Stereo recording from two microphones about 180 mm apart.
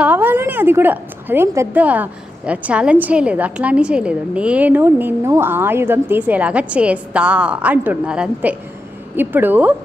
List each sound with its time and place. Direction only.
0.0 s a woman's voice: 10° right (ahead or behind)